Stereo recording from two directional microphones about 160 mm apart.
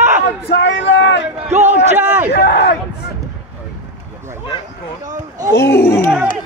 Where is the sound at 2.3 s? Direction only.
90° left.